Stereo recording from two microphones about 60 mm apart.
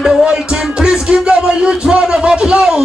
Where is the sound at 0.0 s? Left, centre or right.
Centre.